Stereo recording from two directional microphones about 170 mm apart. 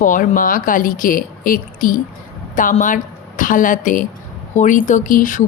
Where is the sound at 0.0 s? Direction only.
50° left (ahead or behind).